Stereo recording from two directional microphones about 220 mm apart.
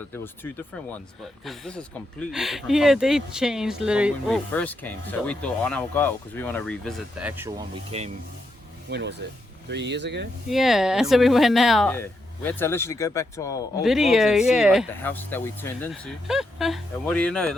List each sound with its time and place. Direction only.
0.1 s speech: 10° left (ahead or behind)
4.5 s speech: 10° left (ahead or behind); by 7.5 s 10° right (ahead or behind)
7.9 s speech: 30° right (ahead or behind)
8.9 s speech: 50° right (ahead or behind)
10.5 s speech: centre (ahead or behind); by 13.8 s 15° left (ahead or behind)
13.8 s speech: centre (ahead or behind)
15.0 s speech: 10° left (ahead or behind)
15.9 s speech: centre (ahead or behind)